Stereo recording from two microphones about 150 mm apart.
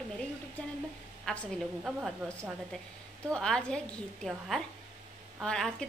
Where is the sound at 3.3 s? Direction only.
5° left (ahead or behind).